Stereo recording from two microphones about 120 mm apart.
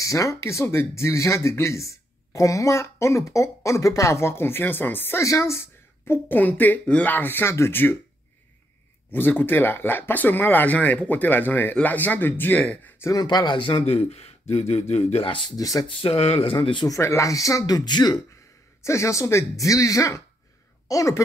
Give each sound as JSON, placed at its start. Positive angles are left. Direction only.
{"t": 0.0, "sound": "speech", "side_deg": 25}
{"t": 9.1, "sound": "speech", "side_deg": 15}
{"t": 13.1, "sound": "speech", "side_deg": 35}
{"t": 13.8, "sound": "speech", "side_deg": 60}
{"t": 15.5, "sound": "speech", "side_deg": 30}
{"t": 15.9, "sound": "speech", "side_deg": 50}
{"t": 16.8, "sound": "speech", "side_deg": 25}
{"t": 18.9, "sound": "speech", "side_deg": 25}